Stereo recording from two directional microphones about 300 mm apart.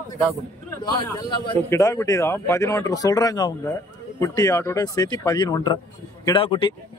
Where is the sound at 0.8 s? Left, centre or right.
Centre.